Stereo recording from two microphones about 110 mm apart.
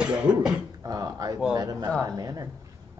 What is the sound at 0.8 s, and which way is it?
Speech, 35° right (ahead or behind).